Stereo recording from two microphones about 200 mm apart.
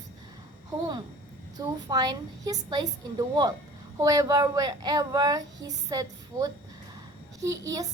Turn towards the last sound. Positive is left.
turn(degrees=-15)  # may be behind; listen again after turning